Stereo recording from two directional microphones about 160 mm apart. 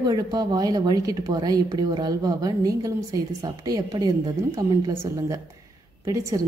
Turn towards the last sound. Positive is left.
turn(degrees=-20)  # may be behind; listen again after turning